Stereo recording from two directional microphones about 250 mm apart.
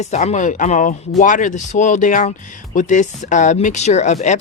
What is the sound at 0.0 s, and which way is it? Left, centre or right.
Speech, left.